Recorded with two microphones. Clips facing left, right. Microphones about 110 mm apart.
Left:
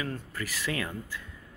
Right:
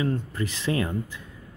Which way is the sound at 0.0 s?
25° right (ahead or behind).